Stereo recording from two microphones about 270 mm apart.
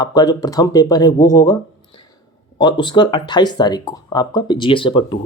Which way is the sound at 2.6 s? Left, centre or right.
Centre.